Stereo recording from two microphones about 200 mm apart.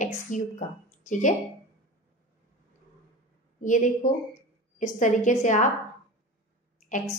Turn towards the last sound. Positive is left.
turn(degrees=40)  # may be behind; listen again after turning